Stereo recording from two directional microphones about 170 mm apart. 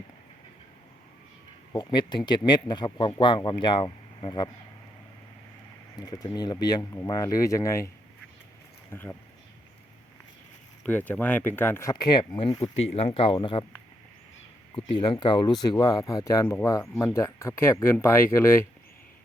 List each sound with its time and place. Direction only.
1.7 s speech: 25° left (ahead or behind)
6.0 s speech: 25° left (ahead or behind)
8.9 s speech: 15° left (ahead or behind)
10.8 s speech: 10° left (ahead or behind); by 13.7 s 30° left (ahead or behind)
14.8 s speech: 30° left (ahead or behind); by 18.6 s 15° left (ahead or behind)